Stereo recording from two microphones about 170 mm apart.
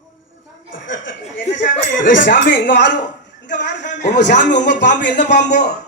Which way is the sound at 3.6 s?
45° left (ahead or behind).